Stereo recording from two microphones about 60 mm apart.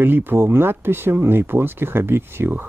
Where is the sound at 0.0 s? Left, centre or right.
Right.